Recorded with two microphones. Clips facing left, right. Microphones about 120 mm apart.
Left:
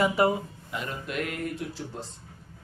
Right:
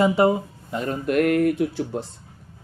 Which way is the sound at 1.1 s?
55° right (ahead or behind).